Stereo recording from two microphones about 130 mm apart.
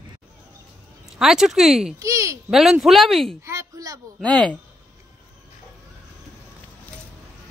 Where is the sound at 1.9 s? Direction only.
25° right (ahead or behind).